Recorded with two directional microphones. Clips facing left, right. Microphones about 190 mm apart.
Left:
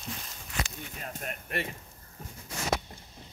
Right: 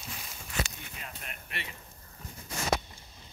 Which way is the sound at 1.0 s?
45° left (ahead or behind).